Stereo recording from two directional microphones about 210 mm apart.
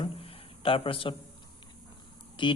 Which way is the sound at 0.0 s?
25° left (ahead or behind).